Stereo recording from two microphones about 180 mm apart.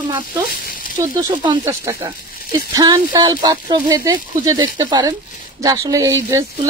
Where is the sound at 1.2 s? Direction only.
20° right (ahead or behind).